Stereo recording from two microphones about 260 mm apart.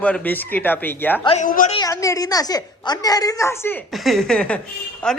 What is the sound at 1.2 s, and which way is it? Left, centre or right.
Speech, left.